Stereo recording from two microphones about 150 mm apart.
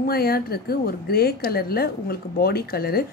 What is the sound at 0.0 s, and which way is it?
A woman's voice, 90° left.